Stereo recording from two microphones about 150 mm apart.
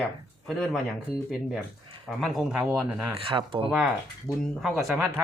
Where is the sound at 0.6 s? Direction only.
5° right (ahead or behind).